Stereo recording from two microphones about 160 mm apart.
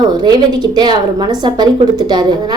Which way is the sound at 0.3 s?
25° right (ahead or behind).